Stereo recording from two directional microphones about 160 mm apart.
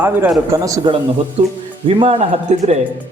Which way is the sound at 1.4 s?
35° right (ahead or behind).